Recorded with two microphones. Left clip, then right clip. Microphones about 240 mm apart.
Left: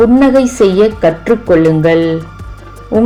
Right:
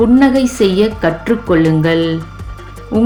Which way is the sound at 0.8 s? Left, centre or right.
Centre.